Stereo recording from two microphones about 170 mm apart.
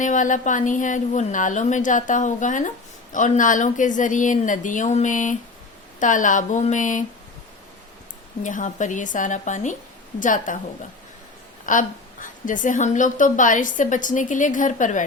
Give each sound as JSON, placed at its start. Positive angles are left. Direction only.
{"t": 0.0, "sound": "a woman's voice", "side_deg": 50}
{"t": 8.4, "sound": "a woman's voice", "side_deg": 50}
{"t": 11.6, "sound": "a woman's voice", "side_deg": 50}